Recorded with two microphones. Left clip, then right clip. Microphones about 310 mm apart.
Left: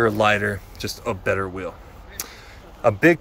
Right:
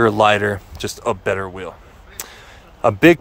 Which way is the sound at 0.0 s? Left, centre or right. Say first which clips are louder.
Right 5 dB; centre.